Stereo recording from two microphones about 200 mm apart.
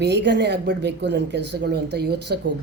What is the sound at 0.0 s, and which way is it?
A woman's voice, 60° right (ahead or behind).